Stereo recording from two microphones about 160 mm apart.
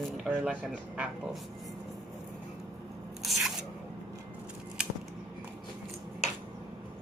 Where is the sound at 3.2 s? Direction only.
Centre (ahead or behind).